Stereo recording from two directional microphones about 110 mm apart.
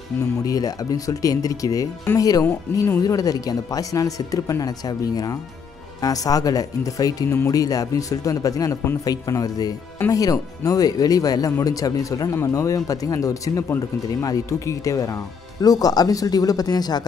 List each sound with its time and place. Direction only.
0.5 s speech: 35° left (ahead or behind)
7.2 s speech: 20° left (ahead or behind)
7.5 s speech: 35° left (ahead or behind)